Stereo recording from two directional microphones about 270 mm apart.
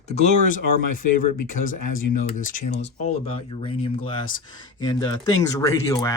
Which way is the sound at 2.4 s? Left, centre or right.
Left.